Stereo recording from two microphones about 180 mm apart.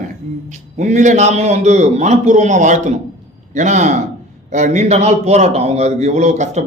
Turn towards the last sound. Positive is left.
turn(degrees=-40)  # may be behind; listen again after turning